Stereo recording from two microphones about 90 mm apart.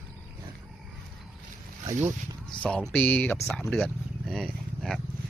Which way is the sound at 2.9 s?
15° left (ahead or behind).